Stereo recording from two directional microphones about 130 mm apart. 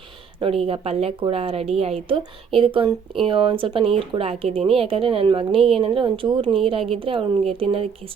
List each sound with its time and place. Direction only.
0.6 s a woman's voice: 50° right (ahead or behind)